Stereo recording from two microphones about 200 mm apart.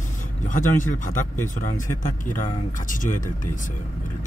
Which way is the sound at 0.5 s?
40° left (ahead or behind).